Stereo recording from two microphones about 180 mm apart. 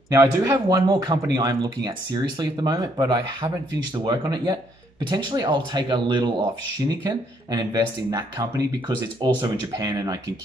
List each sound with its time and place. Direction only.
0.1 s speech: 20° right (ahead or behind)